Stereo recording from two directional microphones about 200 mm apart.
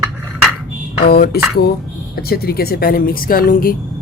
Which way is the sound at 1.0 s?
50° left (ahead or behind).